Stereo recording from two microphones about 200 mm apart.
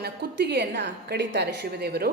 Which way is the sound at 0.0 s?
55° right (ahead or behind).